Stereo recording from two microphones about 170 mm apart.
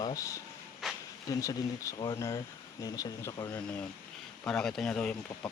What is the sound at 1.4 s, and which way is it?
Speech, 20° left (ahead or behind).